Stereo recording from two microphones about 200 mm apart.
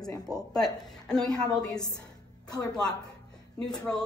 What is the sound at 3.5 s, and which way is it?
Speech, 5° left (ahead or behind).